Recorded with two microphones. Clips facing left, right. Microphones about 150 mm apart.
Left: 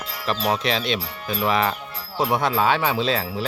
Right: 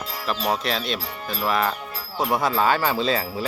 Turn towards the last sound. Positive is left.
turn(degrees=0)  # may be behind; listen again after turning